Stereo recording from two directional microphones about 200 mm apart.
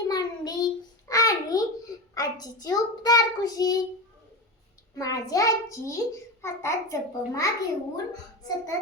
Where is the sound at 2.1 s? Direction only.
20° left (ahead or behind).